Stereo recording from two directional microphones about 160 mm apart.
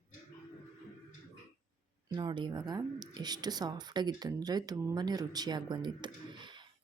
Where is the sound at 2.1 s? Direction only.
30° right (ahead or behind).